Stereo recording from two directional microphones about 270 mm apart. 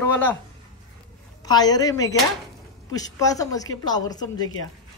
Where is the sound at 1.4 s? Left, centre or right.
Centre.